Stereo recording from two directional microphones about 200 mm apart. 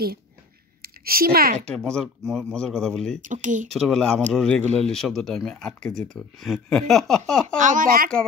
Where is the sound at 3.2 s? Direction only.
40° right (ahead or behind).